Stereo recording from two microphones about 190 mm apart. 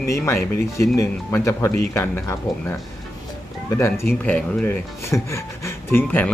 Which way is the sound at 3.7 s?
15° left (ahead or behind).